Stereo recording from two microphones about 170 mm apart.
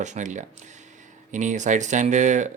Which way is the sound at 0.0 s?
45° right (ahead or behind).